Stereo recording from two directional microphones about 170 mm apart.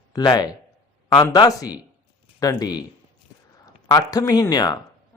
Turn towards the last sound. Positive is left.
turn(degrees=20)  # may be behind; listen again after turning